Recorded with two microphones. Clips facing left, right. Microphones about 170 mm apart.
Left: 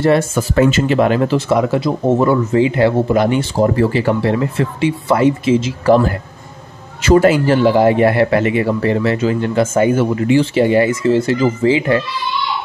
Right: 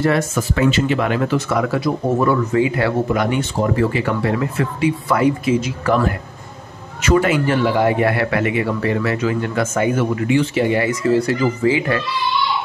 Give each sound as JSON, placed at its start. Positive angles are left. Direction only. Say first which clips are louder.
{"t": 0.0, "sound": "speech", "louder": "left 4 dB", "side_deg": 30}
{"t": 0.6, "sound": "speech", "louder": "left 5 dB", "side_deg": 40}